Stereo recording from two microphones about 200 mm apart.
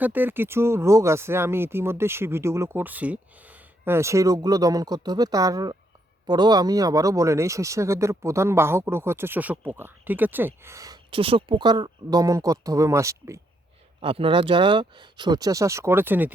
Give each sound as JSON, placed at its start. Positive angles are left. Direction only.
{"t": 0.0, "sound": "speech", "side_deg": -10}
{"t": 14.0, "sound": "speech", "side_deg": -25}